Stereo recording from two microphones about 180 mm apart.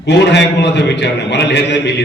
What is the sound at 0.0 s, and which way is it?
A man's voice, 75° left (ahead or behind).